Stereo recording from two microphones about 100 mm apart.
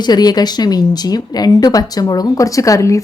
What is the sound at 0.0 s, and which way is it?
Speech, 45° left (ahead or behind).